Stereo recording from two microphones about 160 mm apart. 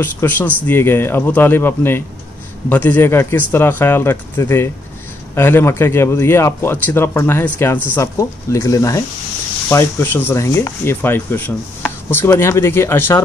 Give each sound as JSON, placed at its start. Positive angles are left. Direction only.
{"t": 0.0, "sound": "speech", "side_deg": 10}